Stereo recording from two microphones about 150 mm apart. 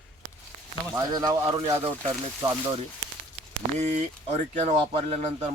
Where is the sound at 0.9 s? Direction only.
25° right (ahead or behind).